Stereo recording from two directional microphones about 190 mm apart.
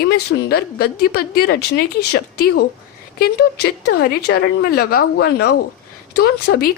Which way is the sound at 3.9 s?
55° left (ahead or behind).